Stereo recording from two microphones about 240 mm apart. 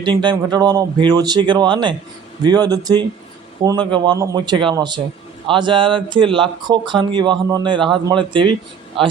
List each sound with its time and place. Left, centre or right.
0.0 s a man's voice: centre